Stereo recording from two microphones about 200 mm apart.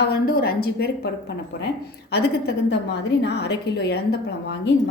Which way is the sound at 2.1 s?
55° left (ahead or behind).